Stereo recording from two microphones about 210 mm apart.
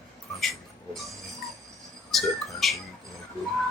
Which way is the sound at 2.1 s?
Centre (ahead or behind).